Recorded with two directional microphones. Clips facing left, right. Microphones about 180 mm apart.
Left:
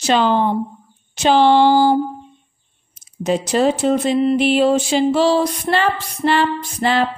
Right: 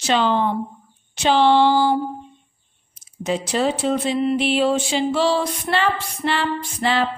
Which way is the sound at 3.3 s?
45° left (ahead or behind).